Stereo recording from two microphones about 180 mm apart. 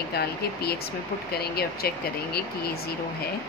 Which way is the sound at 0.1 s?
60° left (ahead or behind).